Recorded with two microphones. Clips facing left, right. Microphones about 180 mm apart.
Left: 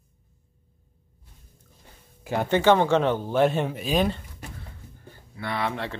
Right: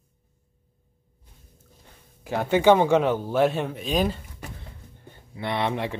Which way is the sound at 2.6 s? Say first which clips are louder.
Right 2 dB; 10° right (ahead or behind).